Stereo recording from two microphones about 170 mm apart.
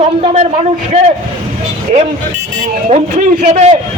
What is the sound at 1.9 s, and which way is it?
Speech, 40° right (ahead or behind).